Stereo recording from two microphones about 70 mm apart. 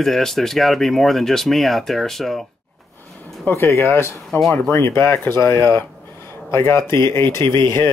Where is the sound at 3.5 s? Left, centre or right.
Left.